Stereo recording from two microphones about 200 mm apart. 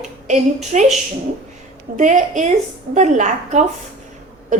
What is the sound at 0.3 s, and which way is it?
Speech, 35° right (ahead or behind).